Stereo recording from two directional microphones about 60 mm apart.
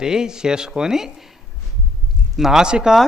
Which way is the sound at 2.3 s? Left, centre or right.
Centre.